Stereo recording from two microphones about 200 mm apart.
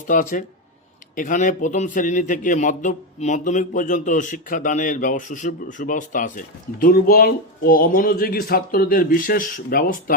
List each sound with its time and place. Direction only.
0.1 s a man's voice: 40° left (ahead or behind)